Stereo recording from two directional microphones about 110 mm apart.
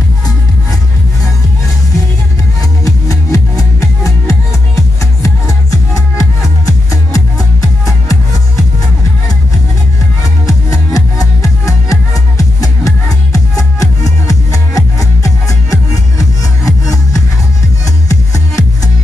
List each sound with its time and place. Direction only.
2.8 s music: 30° left (ahead or behind)
10.4 s music: 30° left (ahead or behind)